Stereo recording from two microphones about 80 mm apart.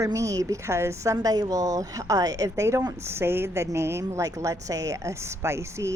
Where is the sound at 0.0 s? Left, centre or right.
Right.